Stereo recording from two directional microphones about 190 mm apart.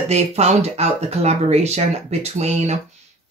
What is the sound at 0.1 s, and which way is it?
Speech, 35° right (ahead or behind).